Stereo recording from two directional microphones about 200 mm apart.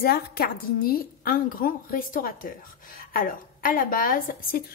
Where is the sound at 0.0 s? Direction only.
50° left (ahead or behind).